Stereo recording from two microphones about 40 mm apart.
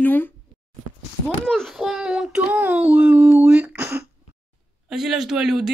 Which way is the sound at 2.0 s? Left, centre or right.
Right.